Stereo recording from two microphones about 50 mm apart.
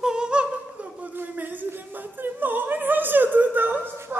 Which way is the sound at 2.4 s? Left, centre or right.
Right.